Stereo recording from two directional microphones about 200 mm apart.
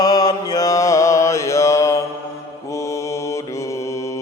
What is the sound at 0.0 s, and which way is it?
Mantra, 20° left (ahead or behind).